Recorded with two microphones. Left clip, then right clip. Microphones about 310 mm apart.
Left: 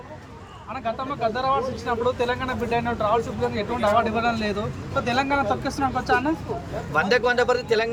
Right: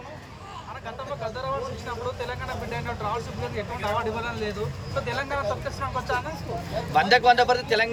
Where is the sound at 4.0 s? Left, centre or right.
Left.